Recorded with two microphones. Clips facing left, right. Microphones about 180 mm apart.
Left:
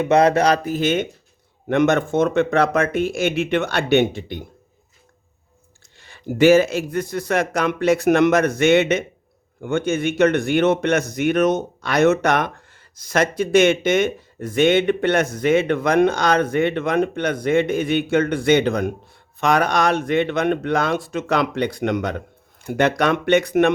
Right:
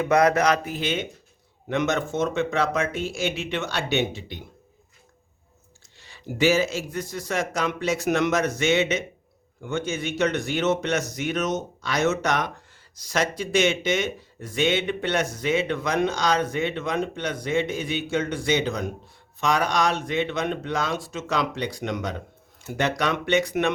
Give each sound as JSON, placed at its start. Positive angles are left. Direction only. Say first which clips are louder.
{"t": 0.0, "sound": "speech", "louder": "left 4 dB", "side_deg": 25}
{"t": 6.0, "sound": "speech", "louder": "left 7 dB", "side_deg": 55}